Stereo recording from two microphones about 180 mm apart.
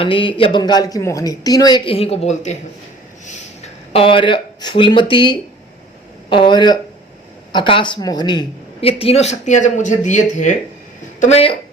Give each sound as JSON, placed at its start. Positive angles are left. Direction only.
{"t": 0.0, "sound": "a woman's voice", "side_deg": 30}